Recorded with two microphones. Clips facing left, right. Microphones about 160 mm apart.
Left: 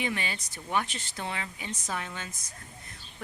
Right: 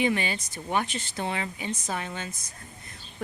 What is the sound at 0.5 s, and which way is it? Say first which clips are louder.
Speech: right 1 dB; 25° right (ahead or behind).